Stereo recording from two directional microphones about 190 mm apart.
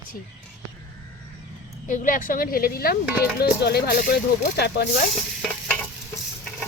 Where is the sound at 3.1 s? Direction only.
10° right (ahead or behind).